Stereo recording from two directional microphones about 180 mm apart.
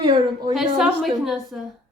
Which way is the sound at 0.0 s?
30° right (ahead or behind).